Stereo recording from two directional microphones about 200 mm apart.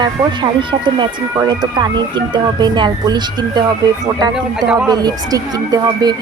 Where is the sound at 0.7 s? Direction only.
20° right (ahead or behind).